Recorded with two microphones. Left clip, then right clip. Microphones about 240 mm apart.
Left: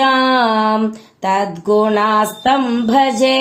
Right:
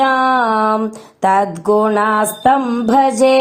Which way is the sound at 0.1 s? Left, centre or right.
Right.